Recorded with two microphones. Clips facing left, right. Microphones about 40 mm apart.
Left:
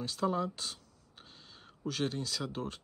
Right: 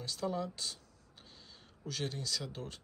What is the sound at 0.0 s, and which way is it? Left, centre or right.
Speech, left.